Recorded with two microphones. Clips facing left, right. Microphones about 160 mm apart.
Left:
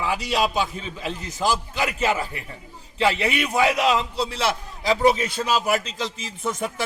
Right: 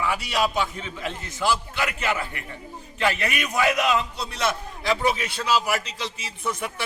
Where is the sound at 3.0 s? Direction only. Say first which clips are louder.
Left 3 dB; 25° left (ahead or behind).